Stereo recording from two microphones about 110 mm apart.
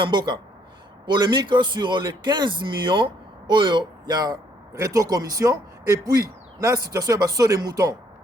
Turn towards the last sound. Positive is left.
turn(degrees=-35)  # may be behind; listen again after turning